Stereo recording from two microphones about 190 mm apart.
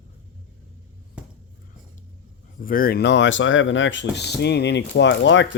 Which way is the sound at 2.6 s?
50° left (ahead or behind).